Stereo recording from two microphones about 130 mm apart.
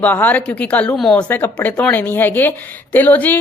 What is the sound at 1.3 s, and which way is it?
Speech, 15° left (ahead or behind).